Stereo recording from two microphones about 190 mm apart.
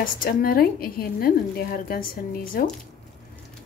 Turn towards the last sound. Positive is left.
turn(degrees=50)  # may be behind; listen again after turning